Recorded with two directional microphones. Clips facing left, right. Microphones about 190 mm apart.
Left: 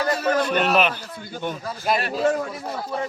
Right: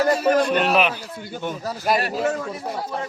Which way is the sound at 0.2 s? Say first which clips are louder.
Right 3 dB; centre (ahead or behind).